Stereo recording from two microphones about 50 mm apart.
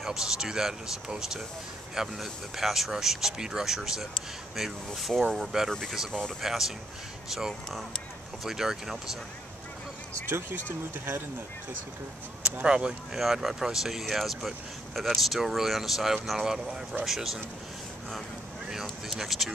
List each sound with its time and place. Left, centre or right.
0.0 s speech: centre
5.7 s speech: centre
6.4 s speech: centre
12.5 s speech: centre
13.2 s speech: centre
18.7 s speech: centre